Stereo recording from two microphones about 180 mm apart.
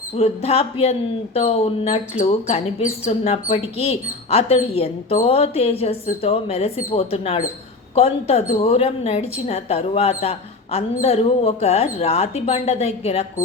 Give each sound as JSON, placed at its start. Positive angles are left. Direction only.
{"t": 0.2, "sound": "speech", "side_deg": 35}